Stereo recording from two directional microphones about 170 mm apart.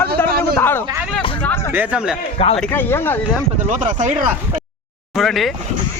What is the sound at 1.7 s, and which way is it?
Speech, 5° right (ahead or behind).